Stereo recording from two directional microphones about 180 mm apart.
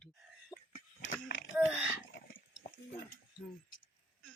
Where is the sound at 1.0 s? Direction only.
90° left.